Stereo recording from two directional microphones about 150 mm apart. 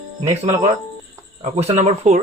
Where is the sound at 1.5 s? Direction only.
50° right (ahead or behind).